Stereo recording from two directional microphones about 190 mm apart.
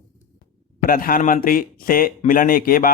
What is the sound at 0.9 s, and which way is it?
Speech, 50° left (ahead or behind).